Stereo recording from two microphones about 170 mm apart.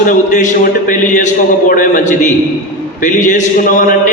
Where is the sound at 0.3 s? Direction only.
50° left (ahead or behind).